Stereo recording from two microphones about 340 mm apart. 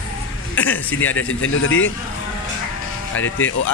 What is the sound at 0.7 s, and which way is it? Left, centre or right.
Speech, left.